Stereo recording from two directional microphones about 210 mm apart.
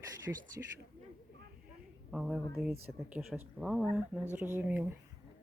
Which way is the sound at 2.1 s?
5° right (ahead or behind).